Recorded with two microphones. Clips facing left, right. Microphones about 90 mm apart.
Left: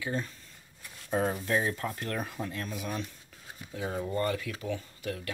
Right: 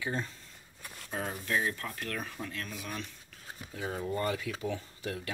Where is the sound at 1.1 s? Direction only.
30° left (ahead or behind).